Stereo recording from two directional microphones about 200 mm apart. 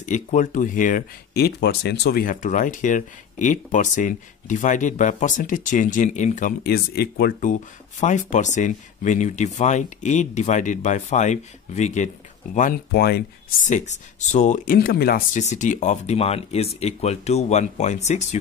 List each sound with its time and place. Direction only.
0.0 s speech: 40° left (ahead or behind)
12.5 s speech: 45° left (ahead or behind)
13.7 s speech: 35° left (ahead or behind)